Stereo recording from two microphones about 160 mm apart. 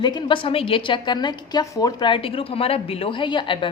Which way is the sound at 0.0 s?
30° left (ahead or behind).